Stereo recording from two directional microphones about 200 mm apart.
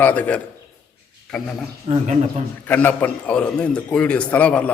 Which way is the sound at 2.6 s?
10° left (ahead or behind).